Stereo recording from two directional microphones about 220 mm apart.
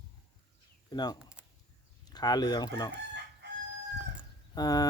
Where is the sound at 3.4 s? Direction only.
50° right (ahead or behind).